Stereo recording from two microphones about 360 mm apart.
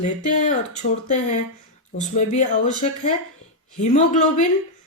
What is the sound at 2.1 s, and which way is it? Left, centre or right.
Speech, centre.